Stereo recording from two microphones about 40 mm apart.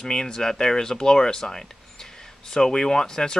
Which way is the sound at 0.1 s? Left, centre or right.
Centre.